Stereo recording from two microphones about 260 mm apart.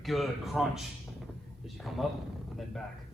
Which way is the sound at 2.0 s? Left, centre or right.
Centre.